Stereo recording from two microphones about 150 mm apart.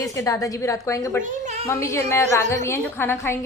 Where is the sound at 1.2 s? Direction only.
55° right (ahead or behind).